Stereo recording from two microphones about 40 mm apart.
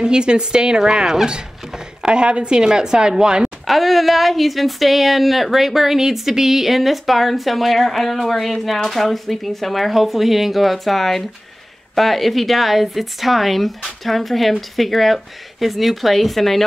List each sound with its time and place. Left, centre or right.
0.0 s speech: right
3.4 s speech: centre